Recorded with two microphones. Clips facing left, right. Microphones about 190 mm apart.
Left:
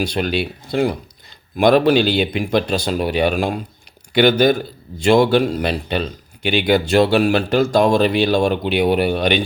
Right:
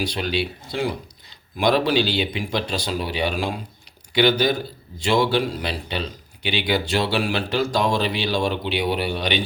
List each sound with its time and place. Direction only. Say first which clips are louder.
0.0 s a man's voice: left 4 dB; 50° left (ahead or behind)